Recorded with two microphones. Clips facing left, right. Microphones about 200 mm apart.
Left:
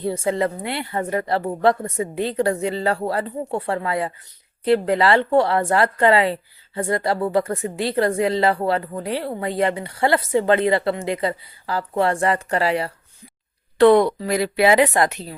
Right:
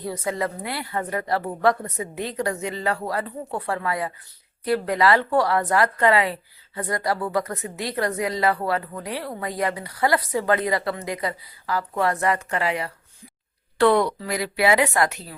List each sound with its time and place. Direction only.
0.0 s a woman's voice: 30° left (ahead or behind)
13.7 s a woman's voice: 20° left (ahead or behind)